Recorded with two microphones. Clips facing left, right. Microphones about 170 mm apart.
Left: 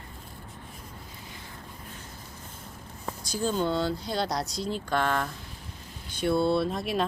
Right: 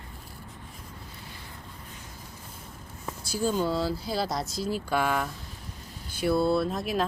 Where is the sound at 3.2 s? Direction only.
10° right (ahead or behind).